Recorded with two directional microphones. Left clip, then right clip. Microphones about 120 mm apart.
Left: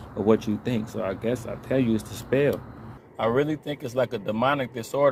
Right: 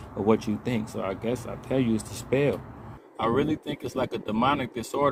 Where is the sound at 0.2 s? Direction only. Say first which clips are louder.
Left 2 dB; 15° right (ahead or behind).